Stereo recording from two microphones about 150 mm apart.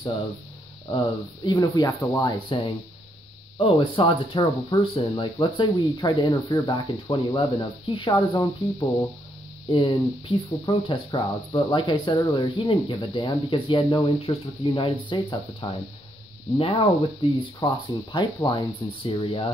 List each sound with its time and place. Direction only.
0.9 s speech: 30° left (ahead or behind)